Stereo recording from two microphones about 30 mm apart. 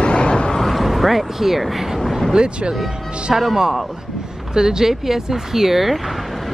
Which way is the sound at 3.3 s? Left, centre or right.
Centre.